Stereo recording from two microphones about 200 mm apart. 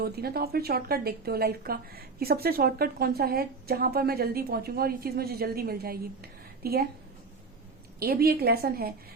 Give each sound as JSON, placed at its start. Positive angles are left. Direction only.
{"t": 0.0, "sound": "a woman's voice", "side_deg": -50}
{"t": 7.9, "sound": "a woman's voice", "side_deg": -50}